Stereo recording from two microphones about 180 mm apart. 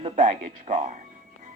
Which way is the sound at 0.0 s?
45° right (ahead or behind).